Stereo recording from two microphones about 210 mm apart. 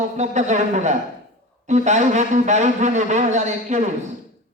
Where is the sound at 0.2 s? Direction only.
35° right (ahead or behind).